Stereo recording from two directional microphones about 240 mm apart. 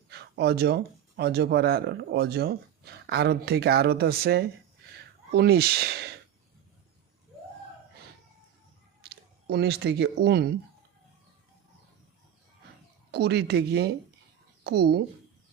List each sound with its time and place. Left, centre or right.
0.1 s speech: right
9.0 s speech: right
13.1 s speech: right